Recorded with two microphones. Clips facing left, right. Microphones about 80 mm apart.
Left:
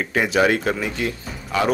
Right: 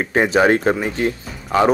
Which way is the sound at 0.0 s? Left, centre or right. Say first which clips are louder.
Right 3 dB; right.